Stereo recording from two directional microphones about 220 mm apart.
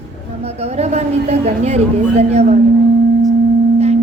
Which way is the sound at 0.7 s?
30° right (ahead or behind).